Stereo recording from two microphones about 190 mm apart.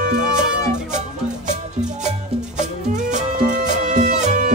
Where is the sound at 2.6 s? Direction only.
40° right (ahead or behind).